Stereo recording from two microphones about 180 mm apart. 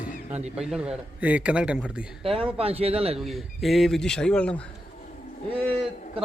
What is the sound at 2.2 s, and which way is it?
Speech, 30° right (ahead or behind).